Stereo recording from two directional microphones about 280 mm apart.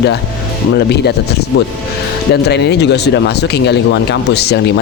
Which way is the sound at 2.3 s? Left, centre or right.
Left.